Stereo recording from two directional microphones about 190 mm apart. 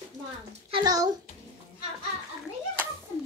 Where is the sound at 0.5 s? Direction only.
30° right (ahead or behind).